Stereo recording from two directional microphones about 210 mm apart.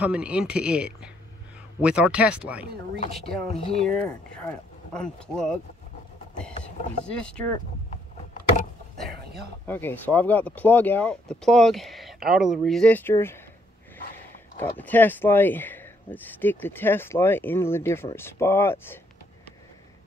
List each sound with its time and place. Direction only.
0.0 s speech: 5° right (ahead or behind)
3.4 s speech: 30° left (ahead or behind)
3.8 s speech: 5° left (ahead or behind)
9.0 s a sound: 50° right (ahead or behind)
9.7 s speech: 10° left (ahead or behind)
14.8 s speech: 10° left (ahead or behind)